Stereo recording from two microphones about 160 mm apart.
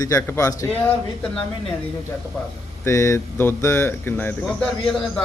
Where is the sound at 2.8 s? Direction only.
20° left (ahead or behind).